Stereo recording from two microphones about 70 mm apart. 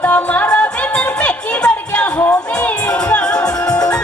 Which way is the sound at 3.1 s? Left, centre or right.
Centre.